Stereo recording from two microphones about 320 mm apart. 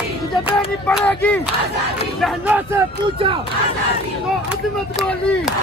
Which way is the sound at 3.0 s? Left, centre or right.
Centre.